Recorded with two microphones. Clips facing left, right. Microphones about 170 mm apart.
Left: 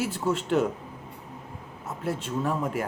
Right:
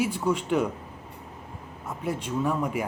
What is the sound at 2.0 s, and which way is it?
Speech, centre (ahead or behind).